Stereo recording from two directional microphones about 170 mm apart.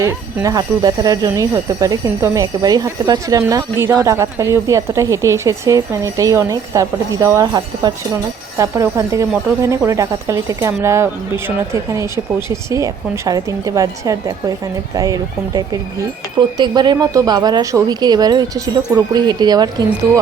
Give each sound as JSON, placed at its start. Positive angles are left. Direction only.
{"t": 0.0, "sound": "speech", "side_deg": -15}